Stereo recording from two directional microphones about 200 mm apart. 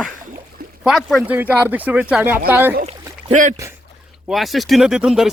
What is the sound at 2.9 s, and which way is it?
Rowboat, 35° right (ahead or behind).